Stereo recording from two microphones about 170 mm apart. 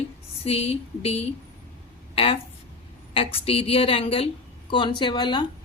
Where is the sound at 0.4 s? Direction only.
35° left (ahead or behind).